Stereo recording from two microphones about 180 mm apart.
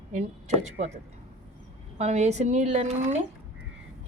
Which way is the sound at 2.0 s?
40° right (ahead or behind).